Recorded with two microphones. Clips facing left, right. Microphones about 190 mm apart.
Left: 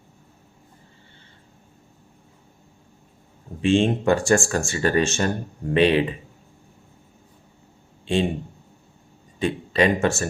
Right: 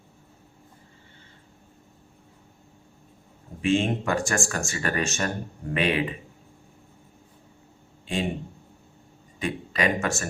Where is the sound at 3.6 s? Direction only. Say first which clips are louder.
Left 4 dB; 30° left (ahead or behind).